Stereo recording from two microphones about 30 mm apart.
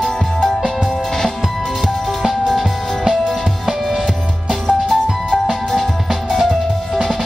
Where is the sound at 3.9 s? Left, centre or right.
Centre.